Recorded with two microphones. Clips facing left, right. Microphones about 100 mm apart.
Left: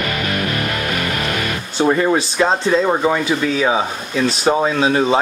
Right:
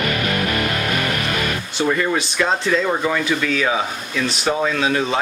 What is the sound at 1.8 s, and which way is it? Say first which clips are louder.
Speech: left 5 dB; 25° left (ahead or behind).